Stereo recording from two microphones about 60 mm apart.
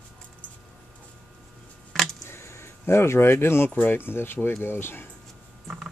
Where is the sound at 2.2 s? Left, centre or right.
Left.